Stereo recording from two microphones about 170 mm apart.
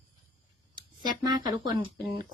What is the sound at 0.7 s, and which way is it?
Speech, 25° right (ahead or behind).